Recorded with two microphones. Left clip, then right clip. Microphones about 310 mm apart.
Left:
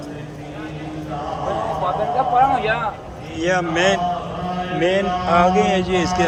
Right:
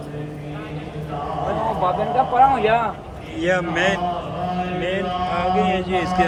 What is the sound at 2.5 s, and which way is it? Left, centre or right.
Speech, right.